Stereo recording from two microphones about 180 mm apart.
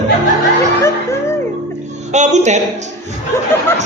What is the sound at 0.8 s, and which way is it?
Speech, 15° left (ahead or behind).